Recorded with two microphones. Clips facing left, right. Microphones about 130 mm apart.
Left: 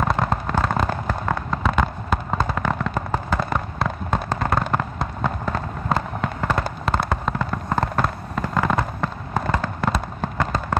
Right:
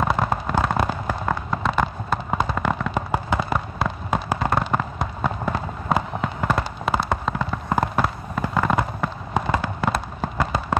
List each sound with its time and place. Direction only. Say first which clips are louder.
0.0 s fireworks: even; 5° right (ahead or behind)
9.3 s fireworks: right 1 dB; 15° right (ahead or behind)
9.8 s fireworks: even; 5° right (ahead or behind)